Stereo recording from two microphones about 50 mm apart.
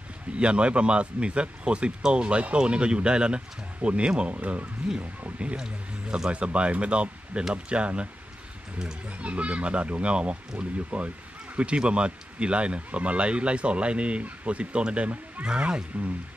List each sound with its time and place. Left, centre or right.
0.3 s speech: right
4.4 s speech: right
5.6 s speech: centre
9.2 s speech: right